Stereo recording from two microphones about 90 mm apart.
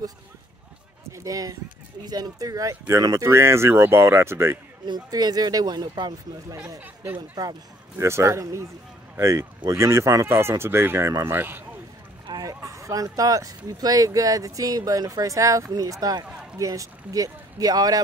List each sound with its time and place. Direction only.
1.1 s speech: 40° right (ahead or behind)
4.8 s speech: 50° right (ahead or behind)
6.8 s speech: 20° right (ahead or behind)
7.2 s speech: 45° right (ahead or behind)
8.0 s speech: 35° right (ahead or behind)
12.4 s speech: 40° right (ahead or behind)